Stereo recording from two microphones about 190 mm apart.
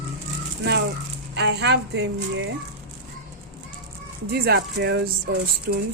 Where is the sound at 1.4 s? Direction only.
65° right (ahead or behind).